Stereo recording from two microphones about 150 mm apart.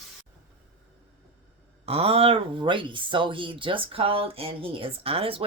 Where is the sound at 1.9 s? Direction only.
40° right (ahead or behind).